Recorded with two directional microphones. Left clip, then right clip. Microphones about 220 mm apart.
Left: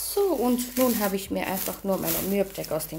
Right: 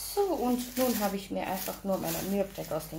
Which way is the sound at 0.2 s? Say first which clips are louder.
Left 5 dB; 50° left (ahead or behind).